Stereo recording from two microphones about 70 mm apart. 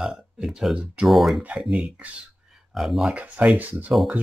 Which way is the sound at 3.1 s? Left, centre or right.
Centre.